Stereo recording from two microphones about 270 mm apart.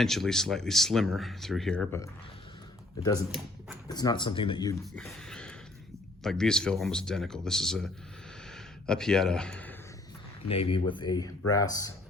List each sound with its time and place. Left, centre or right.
0.0 s speech: centre
3.8 s speech: centre
4.9 s a sound: centre
6.2 s speech: centre
10.5 s speech: centre